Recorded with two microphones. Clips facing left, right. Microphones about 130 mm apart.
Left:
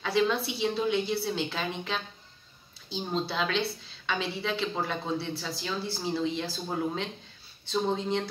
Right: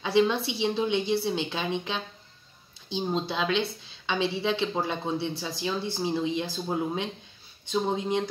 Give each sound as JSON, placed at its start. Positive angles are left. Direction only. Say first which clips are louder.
{"t": 0.0, "sound": "a woman's voice", "louder": "right 3 dB", "side_deg": -20}